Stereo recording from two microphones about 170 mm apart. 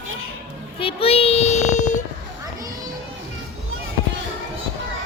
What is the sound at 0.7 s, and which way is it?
A child's voice, 35° left (ahead or behind).